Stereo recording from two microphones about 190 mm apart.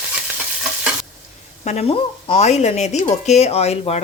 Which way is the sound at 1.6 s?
35° left (ahead or behind).